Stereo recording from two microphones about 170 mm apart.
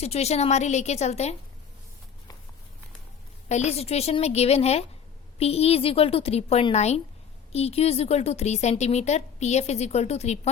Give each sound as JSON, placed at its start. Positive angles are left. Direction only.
{"t": 0.0, "sound": "a woman's voice", "side_deg": 40}
{"t": 3.5, "sound": "a woman's voice", "side_deg": 40}